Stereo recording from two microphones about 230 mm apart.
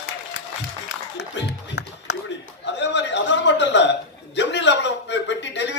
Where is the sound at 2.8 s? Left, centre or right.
Left.